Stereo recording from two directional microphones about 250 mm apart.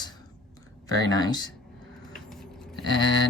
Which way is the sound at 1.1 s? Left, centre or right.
Centre.